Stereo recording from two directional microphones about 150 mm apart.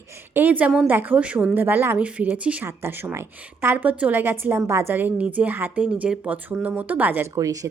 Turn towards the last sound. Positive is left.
turn(degrees=-25)  # may be behind; listen again after turning